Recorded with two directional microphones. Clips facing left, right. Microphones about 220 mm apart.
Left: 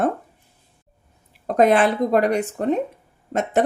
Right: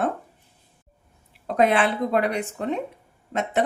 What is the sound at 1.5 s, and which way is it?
Speech, 45° left (ahead or behind).